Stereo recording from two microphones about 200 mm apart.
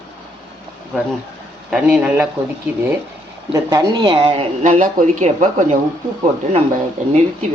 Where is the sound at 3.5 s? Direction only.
15° right (ahead or behind); by 5.8 s 35° right (ahead or behind).